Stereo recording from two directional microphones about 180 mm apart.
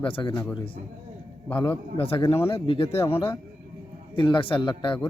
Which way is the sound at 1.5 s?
30° left (ahead or behind).